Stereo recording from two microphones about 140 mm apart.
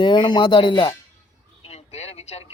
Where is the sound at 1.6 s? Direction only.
50° left (ahead or behind).